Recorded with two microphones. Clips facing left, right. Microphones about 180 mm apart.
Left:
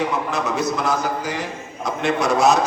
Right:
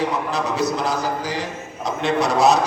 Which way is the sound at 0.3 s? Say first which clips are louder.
Even; 35° right (ahead or behind).